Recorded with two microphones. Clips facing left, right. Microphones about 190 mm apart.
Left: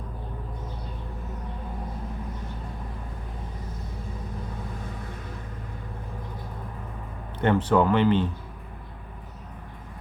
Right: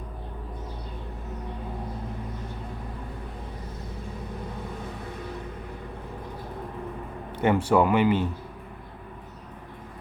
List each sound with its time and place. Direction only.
7.3 s speech: 10° right (ahead or behind)